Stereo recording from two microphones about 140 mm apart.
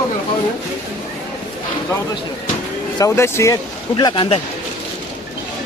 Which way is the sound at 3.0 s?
20° left (ahead or behind).